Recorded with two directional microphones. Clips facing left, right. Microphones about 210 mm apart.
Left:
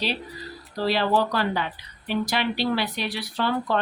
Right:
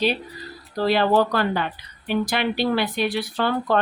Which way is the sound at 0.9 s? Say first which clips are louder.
Right 4 dB; 50° right (ahead or behind).